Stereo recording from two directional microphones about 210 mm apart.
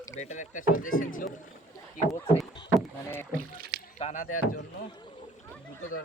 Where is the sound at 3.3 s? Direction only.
40° right (ahead or behind).